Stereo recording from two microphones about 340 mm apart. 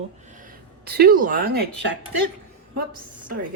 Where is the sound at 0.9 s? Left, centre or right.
Right.